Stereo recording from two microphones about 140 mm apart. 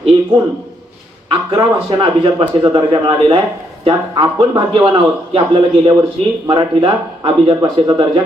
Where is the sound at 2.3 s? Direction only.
30° right (ahead or behind).